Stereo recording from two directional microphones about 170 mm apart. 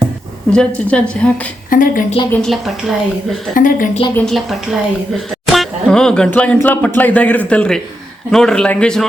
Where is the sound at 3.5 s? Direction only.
55° left (ahead or behind).